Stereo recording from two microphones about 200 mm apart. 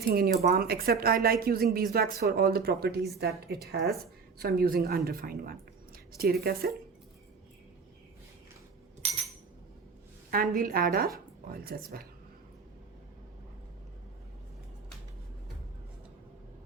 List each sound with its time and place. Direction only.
0.0 s speech: 50° right (ahead or behind)
10.3 s speech: 45° right (ahead or behind)